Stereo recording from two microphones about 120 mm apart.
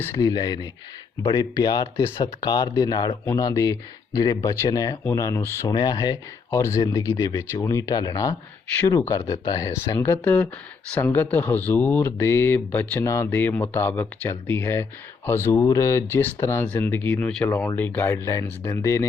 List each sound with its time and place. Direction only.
0.0 s speech: 25° left (ahead or behind)
5.7 s speech: 35° left (ahead or behind)